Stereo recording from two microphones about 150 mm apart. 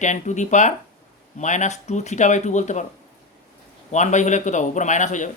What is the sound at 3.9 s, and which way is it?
Speech, 50° left (ahead or behind).